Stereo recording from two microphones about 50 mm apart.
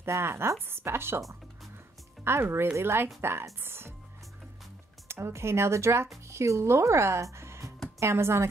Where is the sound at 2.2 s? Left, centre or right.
Right.